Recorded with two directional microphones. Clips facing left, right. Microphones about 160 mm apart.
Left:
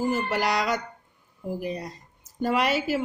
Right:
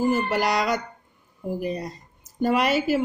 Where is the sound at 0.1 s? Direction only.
20° right (ahead or behind).